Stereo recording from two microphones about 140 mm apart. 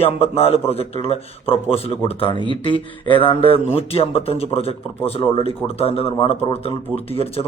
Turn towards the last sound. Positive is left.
turn(degrees=45)  # may be behind; listen again after turning